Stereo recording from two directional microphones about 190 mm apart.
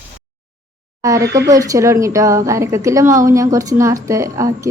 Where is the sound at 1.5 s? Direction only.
15° right (ahead or behind).